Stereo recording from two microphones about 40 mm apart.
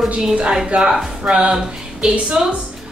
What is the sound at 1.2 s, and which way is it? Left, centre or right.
A woman's voice, right.